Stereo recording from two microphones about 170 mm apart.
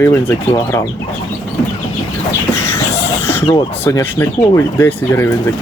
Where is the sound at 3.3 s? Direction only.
15° left (ahead or behind).